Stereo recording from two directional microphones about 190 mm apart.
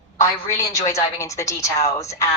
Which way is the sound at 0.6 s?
15° left (ahead or behind).